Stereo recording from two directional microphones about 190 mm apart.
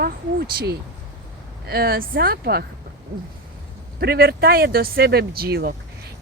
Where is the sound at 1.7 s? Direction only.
50° right (ahead or behind).